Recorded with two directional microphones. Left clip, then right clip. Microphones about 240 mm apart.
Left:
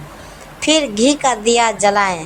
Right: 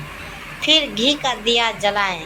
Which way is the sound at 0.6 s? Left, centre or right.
Left.